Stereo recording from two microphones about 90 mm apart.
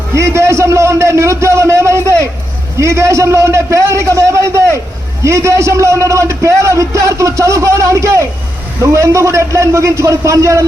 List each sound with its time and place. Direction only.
0.1 s a man's voice: 30° right (ahead or behind)